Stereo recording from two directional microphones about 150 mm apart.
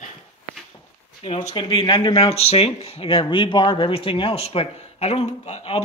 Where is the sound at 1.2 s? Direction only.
40° left (ahead or behind).